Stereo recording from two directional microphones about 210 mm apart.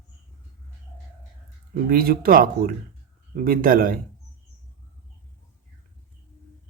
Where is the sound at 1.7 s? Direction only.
45° right (ahead or behind).